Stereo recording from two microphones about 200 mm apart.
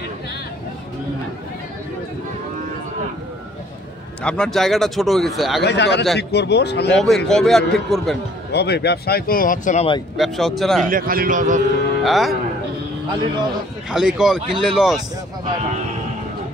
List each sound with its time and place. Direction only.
4.2 s speech: 5° left (ahead or behind)
5.6 s speech: 60° left (ahead or behind)
6.9 s speech: centre (ahead or behind)
8.5 s speech: 55° left (ahead or behind)
10.1 s speech: centre (ahead or behind)
10.9 s a man's voice: 45° right (ahead or behind)
12.0 s speech: centre (ahead or behind)
13.8 s speech: 5° right (ahead or behind)